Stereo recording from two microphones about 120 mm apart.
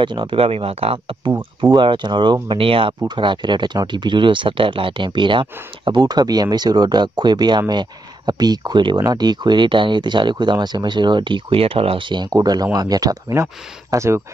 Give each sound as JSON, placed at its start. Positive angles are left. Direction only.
{"t": 0.0, "sound": "speech", "side_deg": -40}